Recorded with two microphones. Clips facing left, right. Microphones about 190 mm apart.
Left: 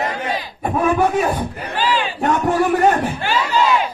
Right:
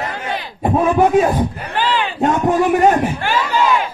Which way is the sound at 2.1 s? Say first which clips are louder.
Right 3 dB; 20° right (ahead or behind).